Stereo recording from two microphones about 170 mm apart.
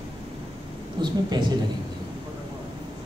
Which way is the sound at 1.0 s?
25° right (ahead or behind).